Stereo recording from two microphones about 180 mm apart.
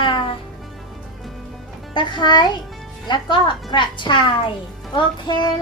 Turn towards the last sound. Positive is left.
turn(degrees=25)  # may be behind; listen again after turning